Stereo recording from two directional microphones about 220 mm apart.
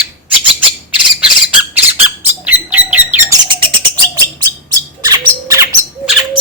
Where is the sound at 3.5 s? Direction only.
20° right (ahead or behind).